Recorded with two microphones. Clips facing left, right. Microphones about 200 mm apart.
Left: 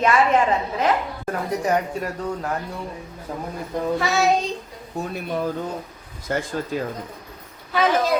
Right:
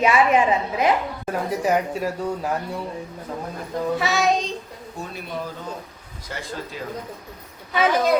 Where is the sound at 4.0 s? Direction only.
Centre (ahead or behind).